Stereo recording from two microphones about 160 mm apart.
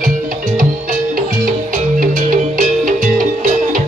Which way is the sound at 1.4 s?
60° right (ahead or behind).